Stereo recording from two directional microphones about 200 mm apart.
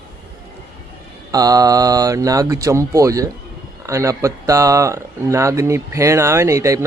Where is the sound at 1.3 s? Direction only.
20° right (ahead or behind).